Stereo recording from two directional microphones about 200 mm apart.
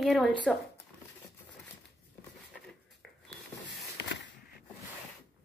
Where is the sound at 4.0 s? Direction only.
60° left (ahead or behind).